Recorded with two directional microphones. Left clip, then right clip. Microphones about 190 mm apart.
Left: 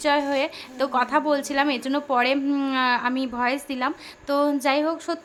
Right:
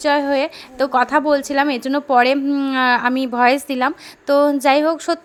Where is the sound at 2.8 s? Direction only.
30° right (ahead or behind).